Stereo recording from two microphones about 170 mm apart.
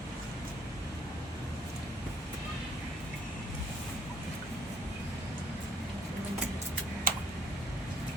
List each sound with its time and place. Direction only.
7.1 s vehicle: 55° right (ahead or behind)